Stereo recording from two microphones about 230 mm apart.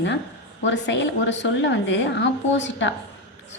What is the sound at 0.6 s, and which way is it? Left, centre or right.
A woman's voice, left.